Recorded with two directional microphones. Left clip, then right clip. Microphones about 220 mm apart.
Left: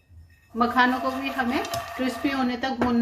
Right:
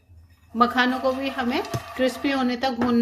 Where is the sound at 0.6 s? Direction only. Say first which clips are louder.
Right 1 dB; 50° right (ahead or behind).